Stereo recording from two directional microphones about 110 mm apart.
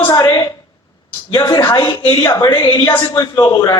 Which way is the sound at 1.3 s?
35° left (ahead or behind).